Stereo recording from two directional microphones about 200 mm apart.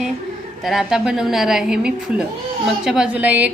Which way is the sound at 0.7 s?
Centre (ahead or behind).